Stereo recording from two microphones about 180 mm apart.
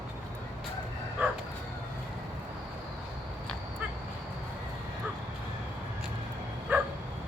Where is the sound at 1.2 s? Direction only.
10° right (ahead or behind).